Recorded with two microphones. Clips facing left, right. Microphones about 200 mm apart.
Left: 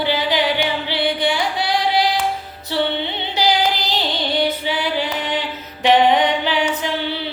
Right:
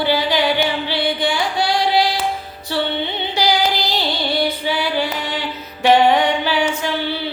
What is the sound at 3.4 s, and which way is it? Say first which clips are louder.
Child singing: even; 20° left (ahead or behind).